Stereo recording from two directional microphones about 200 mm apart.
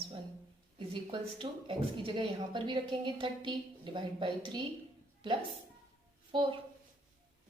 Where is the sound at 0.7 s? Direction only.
25° right (ahead or behind).